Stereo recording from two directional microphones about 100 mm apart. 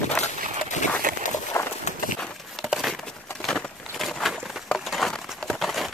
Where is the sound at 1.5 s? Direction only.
25° left (ahead or behind).